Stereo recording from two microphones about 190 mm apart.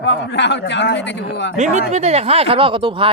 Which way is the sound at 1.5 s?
40° right (ahead or behind).